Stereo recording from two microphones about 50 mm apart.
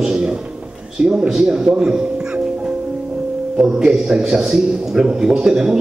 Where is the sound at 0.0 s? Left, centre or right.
Centre.